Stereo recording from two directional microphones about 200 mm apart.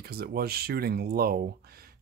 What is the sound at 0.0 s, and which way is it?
Speech, 50° right (ahead or behind).